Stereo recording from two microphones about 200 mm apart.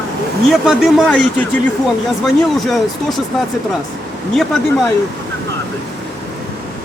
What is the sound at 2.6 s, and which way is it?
Speech, centre (ahead or behind).